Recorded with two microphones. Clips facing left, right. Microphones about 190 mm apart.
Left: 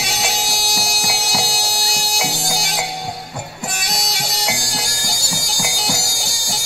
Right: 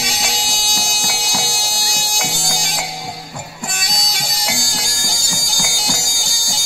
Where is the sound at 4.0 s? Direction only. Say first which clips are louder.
Left 2 dB; 65° left (ahead or behind).